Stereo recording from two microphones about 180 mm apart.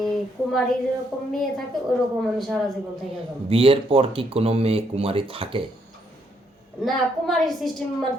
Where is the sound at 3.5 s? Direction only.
30° right (ahead or behind).